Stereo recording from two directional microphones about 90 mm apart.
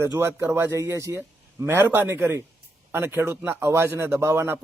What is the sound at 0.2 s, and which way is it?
A man's voice, 25° right (ahead or behind).